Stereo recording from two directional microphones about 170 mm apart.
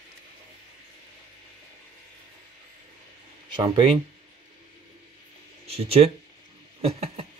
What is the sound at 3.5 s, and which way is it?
Speech, 25° right (ahead or behind).